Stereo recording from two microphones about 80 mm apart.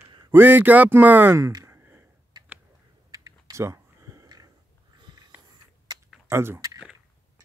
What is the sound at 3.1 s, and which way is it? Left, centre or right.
Typing, right.